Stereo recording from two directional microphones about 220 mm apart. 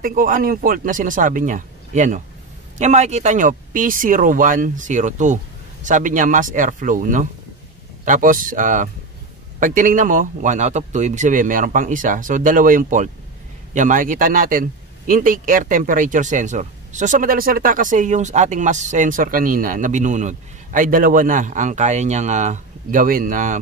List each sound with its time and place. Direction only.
0.0 s a man's voice: 40° right (ahead or behind)